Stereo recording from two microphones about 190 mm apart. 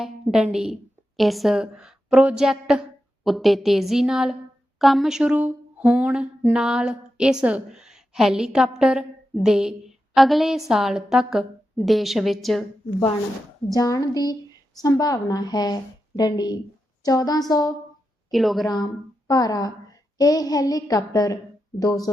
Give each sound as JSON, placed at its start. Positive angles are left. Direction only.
{"t": 0.0, "sound": "a woman's voice", "side_deg": -5}
{"t": 13.7, "sound": "a woman's voice", "side_deg": 20}
{"t": 18.3, "sound": "a woman's voice", "side_deg": 0}
{"t": 19.3, "sound": "a woman's voice", "side_deg": 20}